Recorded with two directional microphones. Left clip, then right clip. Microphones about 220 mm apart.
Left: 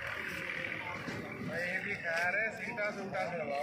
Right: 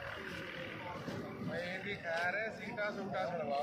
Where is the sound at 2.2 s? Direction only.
15° right (ahead or behind).